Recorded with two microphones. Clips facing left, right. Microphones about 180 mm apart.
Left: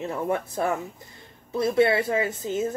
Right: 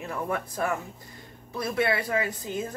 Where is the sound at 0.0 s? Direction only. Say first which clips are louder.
Left 4 dB; 25° left (ahead or behind).